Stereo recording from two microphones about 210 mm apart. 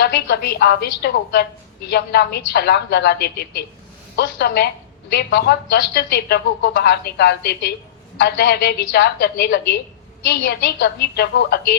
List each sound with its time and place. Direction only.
0.0 s a woman's voice: 50° left (ahead or behind)